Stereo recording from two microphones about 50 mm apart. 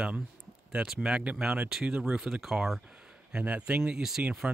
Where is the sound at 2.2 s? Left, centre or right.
Centre.